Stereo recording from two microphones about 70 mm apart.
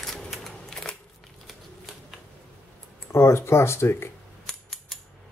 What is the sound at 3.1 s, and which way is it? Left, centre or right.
Speech, left.